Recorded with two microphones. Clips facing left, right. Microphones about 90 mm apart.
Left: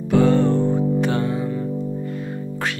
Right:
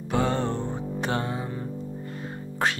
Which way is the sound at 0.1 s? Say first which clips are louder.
Left 9 dB; 30° right (ahead or behind).